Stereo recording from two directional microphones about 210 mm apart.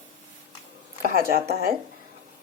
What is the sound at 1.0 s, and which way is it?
Speech, 45° right (ahead or behind).